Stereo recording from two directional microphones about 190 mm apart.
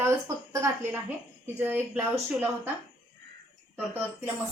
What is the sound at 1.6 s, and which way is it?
Speech, 10° right (ahead or behind).